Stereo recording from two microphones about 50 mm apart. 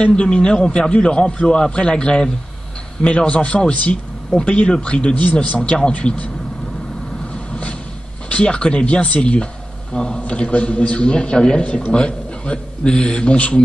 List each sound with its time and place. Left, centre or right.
0.0 s a man's voice: centre
8.3 s a man's voice: left